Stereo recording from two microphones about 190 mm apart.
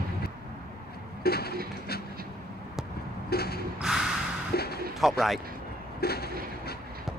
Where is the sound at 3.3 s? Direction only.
55° left (ahead or behind).